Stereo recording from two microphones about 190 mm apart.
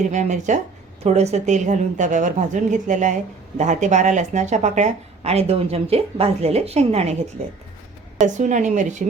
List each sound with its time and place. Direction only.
0.1 s speech: 40° right (ahead or behind)
8.2 s speech: 40° right (ahead or behind)